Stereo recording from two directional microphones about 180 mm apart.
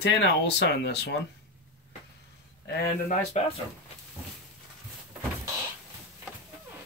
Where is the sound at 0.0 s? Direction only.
75° left (ahead or behind).